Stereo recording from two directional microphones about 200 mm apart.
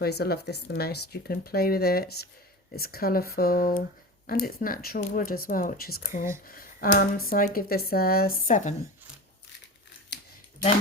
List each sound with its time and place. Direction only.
0.0 s speech: 50° left (ahead or behind)